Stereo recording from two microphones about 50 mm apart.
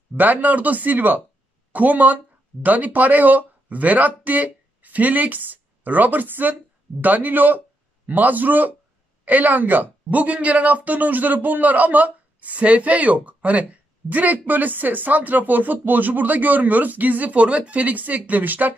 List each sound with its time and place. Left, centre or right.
0.1 s speech: right